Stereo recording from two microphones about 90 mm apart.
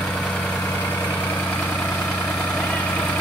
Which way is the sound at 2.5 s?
15° left (ahead or behind).